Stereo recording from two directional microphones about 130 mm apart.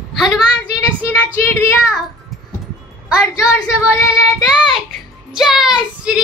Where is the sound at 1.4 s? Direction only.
20° left (ahead or behind).